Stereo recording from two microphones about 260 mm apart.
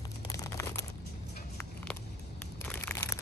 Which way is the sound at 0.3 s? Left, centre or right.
Centre.